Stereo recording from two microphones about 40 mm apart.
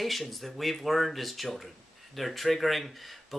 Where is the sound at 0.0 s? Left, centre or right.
Centre.